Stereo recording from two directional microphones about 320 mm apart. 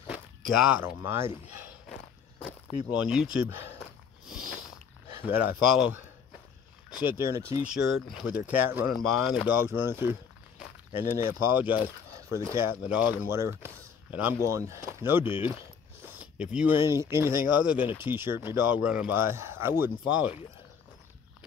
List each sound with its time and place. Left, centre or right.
0.1 s speech: centre
3.1 s speech: centre
5.2 s speech: centre